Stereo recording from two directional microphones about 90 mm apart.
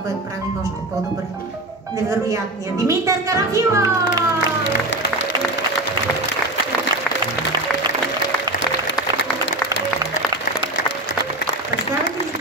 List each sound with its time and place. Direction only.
2.0 s a woman's voice: 35° right (ahead or behind)